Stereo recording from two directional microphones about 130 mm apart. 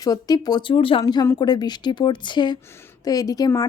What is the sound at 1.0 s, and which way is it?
A woman's voice, 25° left (ahead or behind).